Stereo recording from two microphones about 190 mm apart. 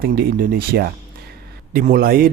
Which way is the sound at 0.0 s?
55° right (ahead or behind).